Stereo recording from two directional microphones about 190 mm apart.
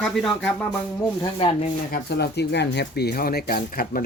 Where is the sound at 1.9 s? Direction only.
60° left (ahead or behind).